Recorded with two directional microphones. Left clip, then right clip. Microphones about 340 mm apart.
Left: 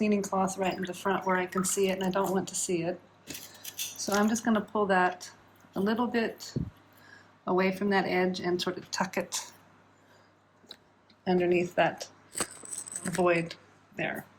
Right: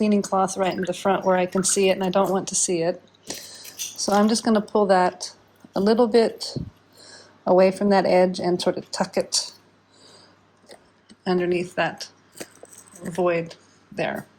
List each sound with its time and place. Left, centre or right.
0.0 s speech: centre
7.4 s speech: centre
11.2 s speech: centre
12.4 s a sound: right
13.1 s speech: centre